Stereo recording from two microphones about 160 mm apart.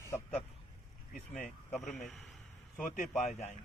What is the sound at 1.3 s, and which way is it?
Speech, 45° left (ahead or behind).